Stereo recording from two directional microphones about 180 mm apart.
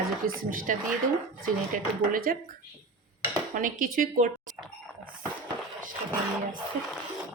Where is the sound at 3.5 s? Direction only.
50° right (ahead or behind).